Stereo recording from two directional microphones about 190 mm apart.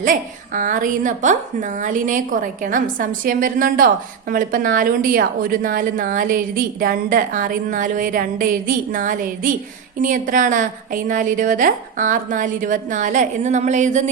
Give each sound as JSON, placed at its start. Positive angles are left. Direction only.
{"t": 0.0, "sound": "a woman's voice", "side_deg": -45}